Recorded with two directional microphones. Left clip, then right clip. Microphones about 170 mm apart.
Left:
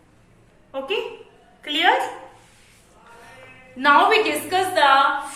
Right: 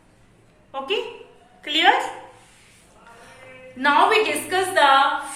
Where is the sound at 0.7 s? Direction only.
15° right (ahead or behind).